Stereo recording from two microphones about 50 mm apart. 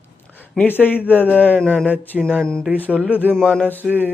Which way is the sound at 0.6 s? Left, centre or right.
Left.